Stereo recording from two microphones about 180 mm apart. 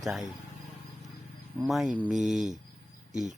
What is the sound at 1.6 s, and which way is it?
Speech, centre (ahead or behind).